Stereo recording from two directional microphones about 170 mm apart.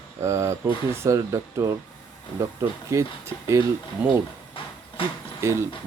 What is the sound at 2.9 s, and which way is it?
Speech, 15° right (ahead or behind).